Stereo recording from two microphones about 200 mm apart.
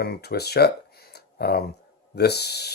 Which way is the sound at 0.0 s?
50° left (ahead or behind).